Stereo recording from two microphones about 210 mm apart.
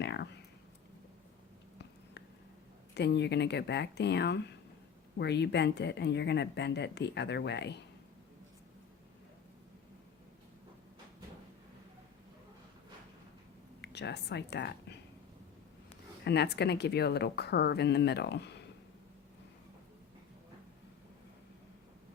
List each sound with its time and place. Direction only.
0.0 s a sound: 55° left (ahead or behind)
2.9 s speech: 55° left (ahead or behind)
13.8 s speech: 55° left (ahead or behind)
16.2 s speech: 50° left (ahead or behind)